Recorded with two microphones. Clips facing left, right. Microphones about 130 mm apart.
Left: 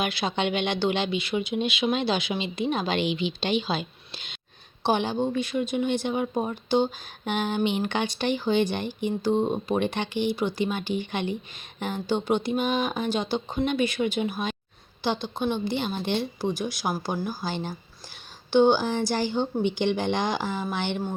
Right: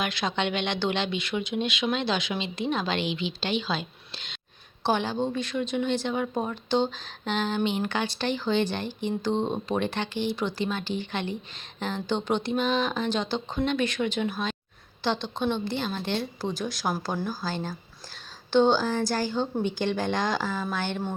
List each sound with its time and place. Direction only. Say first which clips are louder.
0.0 s a woman's voice: left 2 dB; 10° left (ahead or behind)